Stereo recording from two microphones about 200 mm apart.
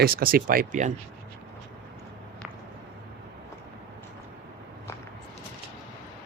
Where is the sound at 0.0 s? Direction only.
50° right (ahead or behind).